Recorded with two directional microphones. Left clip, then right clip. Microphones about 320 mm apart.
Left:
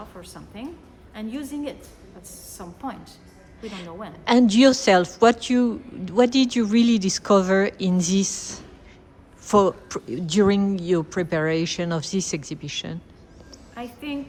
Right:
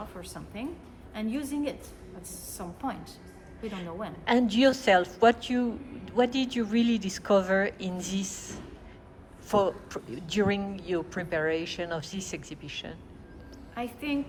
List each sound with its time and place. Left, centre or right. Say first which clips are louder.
0.2 s a woman's voice: left 1 dB; centre
3.6 s a woman's voice: left 2 dB; left
3.8 s a woman's voice: left 1 dB; centre
4.3 s a woman's voice: left 7 dB; left
13.8 s a woman's voice: even; centre